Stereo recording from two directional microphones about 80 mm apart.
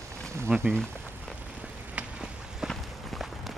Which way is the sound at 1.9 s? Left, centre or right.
Centre.